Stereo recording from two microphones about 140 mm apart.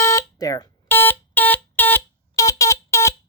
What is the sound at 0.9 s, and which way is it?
Smoke detector, 15° left (ahead or behind).